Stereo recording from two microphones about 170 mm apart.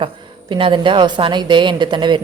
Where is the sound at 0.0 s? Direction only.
30° right (ahead or behind).